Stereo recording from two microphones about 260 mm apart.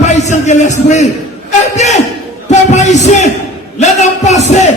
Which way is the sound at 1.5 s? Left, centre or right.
Left.